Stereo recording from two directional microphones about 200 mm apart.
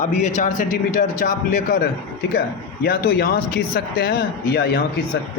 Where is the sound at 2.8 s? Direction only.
50° left (ahead or behind).